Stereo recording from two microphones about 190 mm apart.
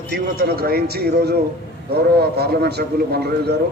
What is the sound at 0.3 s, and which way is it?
A man's voice, 55° right (ahead or behind).